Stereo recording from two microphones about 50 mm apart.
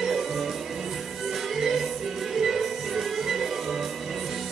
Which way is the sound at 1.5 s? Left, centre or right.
Centre.